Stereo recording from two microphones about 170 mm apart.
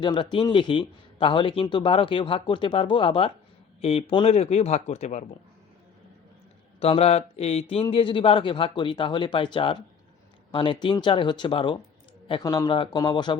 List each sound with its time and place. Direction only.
0.0 s speech: 30° left (ahead or behind)
6.7 s speech: 35° left (ahead or behind)